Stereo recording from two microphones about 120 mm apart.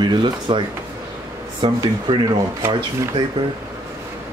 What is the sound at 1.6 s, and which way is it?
Speech, 40° right (ahead or behind).